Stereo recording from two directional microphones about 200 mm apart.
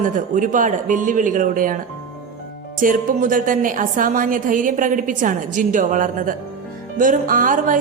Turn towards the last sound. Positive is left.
turn(degrees=-40)  # may be behind; listen again after turning